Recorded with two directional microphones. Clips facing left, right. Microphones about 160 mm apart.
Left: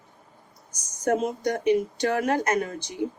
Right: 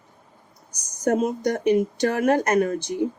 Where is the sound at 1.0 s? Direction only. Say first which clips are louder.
Right 3 dB; 40° right (ahead or behind).